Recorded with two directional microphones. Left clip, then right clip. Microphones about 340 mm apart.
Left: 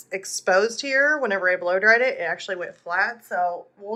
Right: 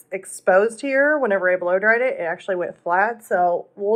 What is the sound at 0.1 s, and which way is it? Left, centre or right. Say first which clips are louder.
Speech: right 3 dB; centre.